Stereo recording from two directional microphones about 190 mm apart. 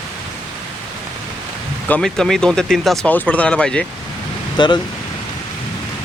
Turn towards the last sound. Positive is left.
turn(degrees=25)  # may be behind; listen again after turning